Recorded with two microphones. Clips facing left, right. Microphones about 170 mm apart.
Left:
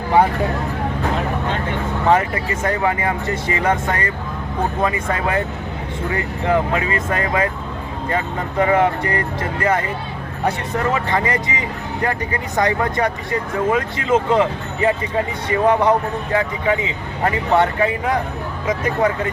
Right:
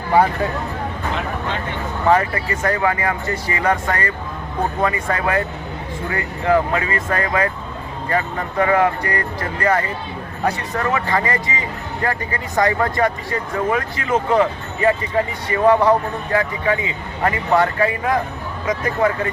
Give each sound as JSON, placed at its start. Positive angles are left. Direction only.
{"t": 2.0, "sound": "speech", "side_deg": 20}